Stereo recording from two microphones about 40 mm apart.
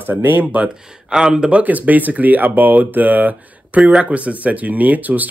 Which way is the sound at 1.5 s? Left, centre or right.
Right.